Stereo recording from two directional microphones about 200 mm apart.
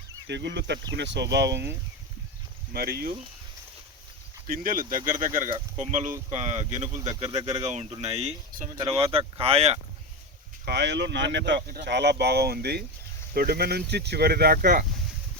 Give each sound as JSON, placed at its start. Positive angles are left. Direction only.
{"t": 0.3, "sound": "speech", "side_deg": -60}
{"t": 2.7, "sound": "speech", "side_deg": -50}
{"t": 4.4, "sound": "speech", "side_deg": -45}
{"t": 8.8, "sound": "speech", "side_deg": -30}
{"t": 10.7, "sound": "speech", "side_deg": -60}